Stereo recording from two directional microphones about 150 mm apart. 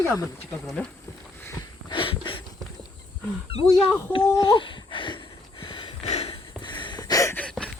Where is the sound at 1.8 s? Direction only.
35° left (ahead or behind).